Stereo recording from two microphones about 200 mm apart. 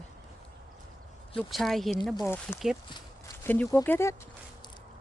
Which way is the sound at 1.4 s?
Centre (ahead or behind).